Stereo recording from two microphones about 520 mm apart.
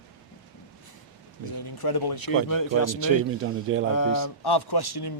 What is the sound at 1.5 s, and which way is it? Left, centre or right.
Speech, left.